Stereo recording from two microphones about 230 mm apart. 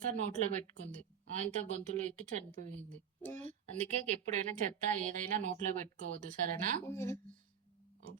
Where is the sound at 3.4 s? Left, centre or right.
Right.